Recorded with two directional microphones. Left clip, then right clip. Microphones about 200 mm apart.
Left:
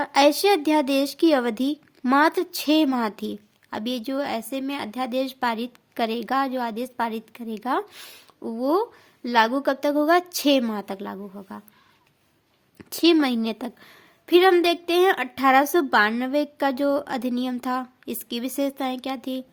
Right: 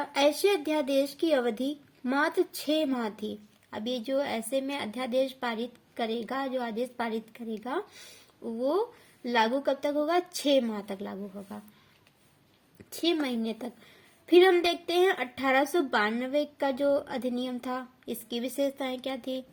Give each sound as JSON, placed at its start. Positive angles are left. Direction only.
{"t": 0.0, "sound": "a woman's voice", "side_deg": 40}
{"t": 12.9, "sound": "a woman's voice", "side_deg": 45}